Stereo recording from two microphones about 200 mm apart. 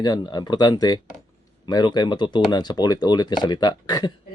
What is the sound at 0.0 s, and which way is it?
Speech, 20° left (ahead or behind).